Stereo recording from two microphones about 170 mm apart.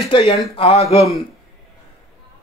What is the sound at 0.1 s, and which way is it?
Speech, 35° left (ahead or behind).